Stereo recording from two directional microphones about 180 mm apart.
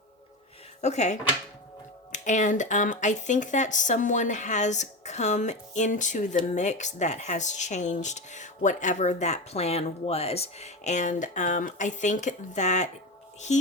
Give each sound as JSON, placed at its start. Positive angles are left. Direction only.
{"t": 0.8, "sound": "speech", "side_deg": 40}
{"t": 2.1, "sound": "speech", "side_deg": 45}